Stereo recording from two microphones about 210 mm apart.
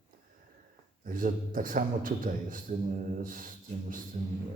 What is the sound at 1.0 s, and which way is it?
A man's voice, 40° right (ahead or behind).